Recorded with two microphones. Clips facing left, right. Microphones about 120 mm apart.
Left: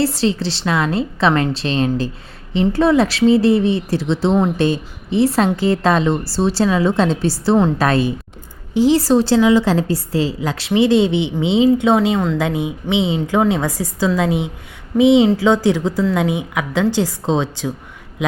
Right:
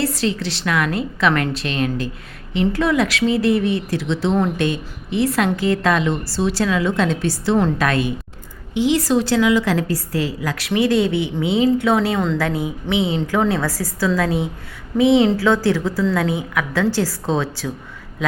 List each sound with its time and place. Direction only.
0.0 s a woman's voice: 30° left (ahead or behind)